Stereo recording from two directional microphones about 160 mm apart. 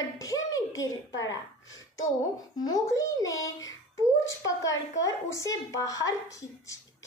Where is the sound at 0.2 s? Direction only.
20° left (ahead or behind).